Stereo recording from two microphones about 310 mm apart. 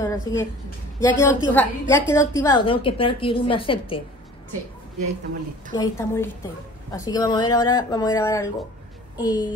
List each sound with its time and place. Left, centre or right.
0.0 s a sound: centre
1.0 s a woman's voice: centre
5.7 s a woman's voice: centre